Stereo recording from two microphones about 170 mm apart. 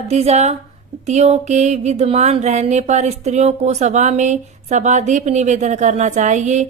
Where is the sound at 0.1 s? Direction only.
40° right (ahead or behind).